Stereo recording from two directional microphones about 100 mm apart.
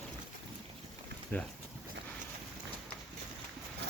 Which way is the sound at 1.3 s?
20° left (ahead or behind).